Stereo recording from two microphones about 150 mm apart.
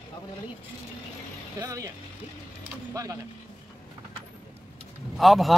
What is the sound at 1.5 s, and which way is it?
Speech, 20° right (ahead or behind).